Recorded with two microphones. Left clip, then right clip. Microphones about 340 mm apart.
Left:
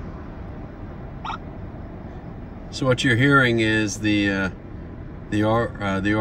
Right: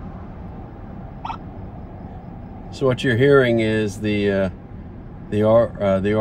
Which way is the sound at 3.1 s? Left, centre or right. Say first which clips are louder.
Right 4 dB; left.